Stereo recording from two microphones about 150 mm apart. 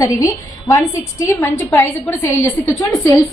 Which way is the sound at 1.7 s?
15° left (ahead or behind).